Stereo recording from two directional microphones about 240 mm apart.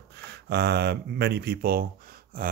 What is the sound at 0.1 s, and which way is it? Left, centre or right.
Speech, right.